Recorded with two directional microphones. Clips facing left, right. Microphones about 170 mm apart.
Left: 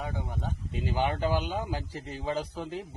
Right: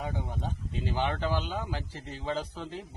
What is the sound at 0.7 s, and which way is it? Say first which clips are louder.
Speech: left 2 dB; 15° left (ahead or behind).